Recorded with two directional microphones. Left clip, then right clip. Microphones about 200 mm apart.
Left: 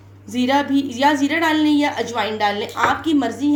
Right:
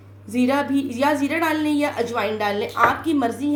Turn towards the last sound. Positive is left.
turn(degrees=0)  # may be behind; listen again after turning